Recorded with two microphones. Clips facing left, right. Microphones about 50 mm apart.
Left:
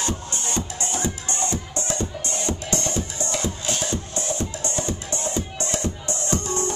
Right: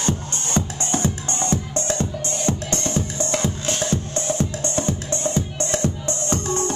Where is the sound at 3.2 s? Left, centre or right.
Right.